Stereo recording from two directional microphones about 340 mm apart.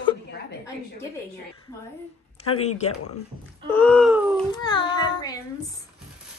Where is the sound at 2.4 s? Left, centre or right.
Centre.